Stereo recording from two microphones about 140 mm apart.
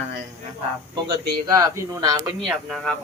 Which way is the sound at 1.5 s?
25° right (ahead or behind).